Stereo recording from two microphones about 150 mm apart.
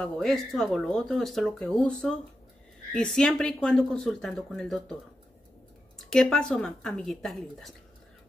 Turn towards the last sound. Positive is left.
turn(degrees=5)  # may be behind; listen again after turning